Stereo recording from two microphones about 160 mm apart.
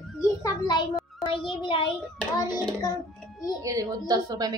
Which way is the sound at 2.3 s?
25° left (ahead or behind).